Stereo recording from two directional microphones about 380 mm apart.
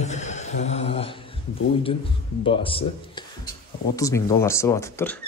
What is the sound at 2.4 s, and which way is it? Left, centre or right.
Speech, centre.